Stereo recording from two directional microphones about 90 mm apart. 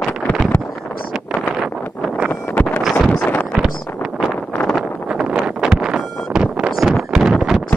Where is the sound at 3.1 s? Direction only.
15° left (ahead or behind).